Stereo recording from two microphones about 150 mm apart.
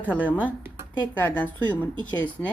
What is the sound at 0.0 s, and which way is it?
Speech, 10° left (ahead or behind).